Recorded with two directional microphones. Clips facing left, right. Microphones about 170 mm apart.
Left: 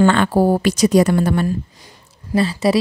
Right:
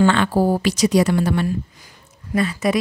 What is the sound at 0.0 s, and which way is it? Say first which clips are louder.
Speech: left 2 dB; 50° left (ahead or behind).